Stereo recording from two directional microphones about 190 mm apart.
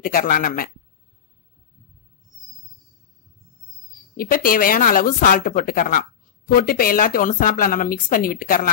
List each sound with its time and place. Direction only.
0.0 s speech: 45° left (ahead or behind)
4.2 s speech: 50° left (ahead or behind)